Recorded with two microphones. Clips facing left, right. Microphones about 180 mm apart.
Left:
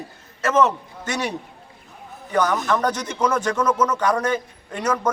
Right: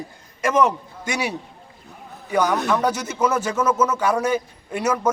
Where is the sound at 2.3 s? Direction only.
10° right (ahead or behind).